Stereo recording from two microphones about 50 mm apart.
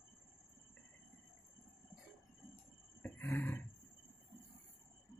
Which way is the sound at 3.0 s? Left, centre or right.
Left.